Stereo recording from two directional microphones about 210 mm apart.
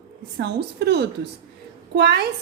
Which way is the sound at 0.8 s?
50° right (ahead or behind).